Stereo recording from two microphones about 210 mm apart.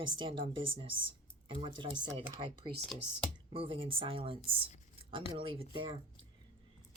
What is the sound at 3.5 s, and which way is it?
Speech, 25° right (ahead or behind).